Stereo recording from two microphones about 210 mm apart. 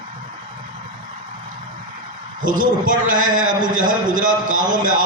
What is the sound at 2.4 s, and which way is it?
A man's voice, 40° right (ahead or behind).